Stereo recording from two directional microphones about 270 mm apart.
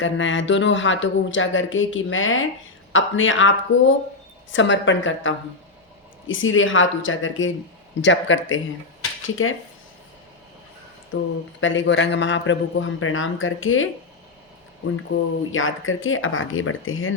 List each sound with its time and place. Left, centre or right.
0.0 s speech: left
4.5 s speech: left
11.1 s speech: left
15.5 s speech: left